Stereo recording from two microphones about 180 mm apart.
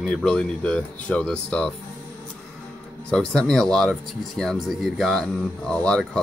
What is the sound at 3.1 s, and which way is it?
Speech, 5° left (ahead or behind).